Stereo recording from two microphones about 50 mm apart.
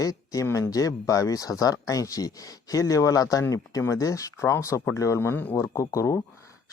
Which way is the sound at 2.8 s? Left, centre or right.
Left.